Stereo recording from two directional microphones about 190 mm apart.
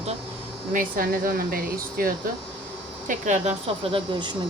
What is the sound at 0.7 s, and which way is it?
Speech, 45° right (ahead or behind).